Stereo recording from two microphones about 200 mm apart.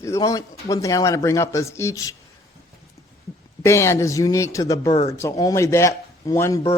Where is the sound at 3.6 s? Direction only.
15° left (ahead or behind).